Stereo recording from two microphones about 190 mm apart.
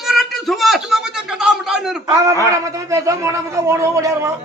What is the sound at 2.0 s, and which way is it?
A man's voice, 15° right (ahead or behind).